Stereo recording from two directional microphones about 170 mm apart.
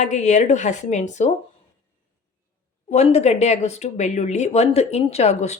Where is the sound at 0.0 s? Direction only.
45° left (ahead or behind).